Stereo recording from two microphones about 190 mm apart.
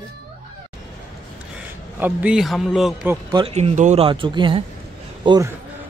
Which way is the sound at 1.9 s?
10° right (ahead or behind).